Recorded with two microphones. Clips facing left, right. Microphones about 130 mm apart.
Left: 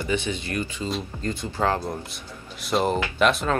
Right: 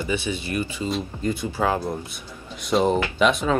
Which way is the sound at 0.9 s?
Centre (ahead or behind).